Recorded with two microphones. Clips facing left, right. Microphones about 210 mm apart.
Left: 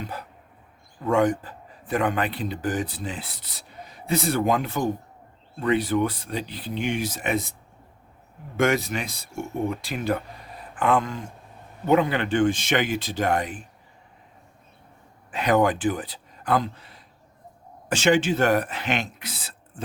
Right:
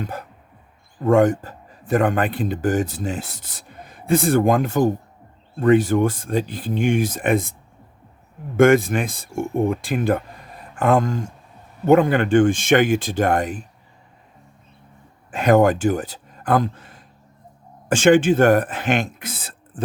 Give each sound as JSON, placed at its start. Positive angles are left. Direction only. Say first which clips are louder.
{"t": 0.0, "sound": "a sound", "louder": "right 5 dB", "side_deg": -45}
{"t": 1.0, "sound": "a man's voice", "louder": "right 6 dB", "side_deg": -45}
{"t": 8.5, "sound": "a man's voice", "louder": "right 8 dB", "side_deg": -50}
{"t": 15.3, "sound": "a man's voice", "louder": "right 6 dB", "side_deg": -45}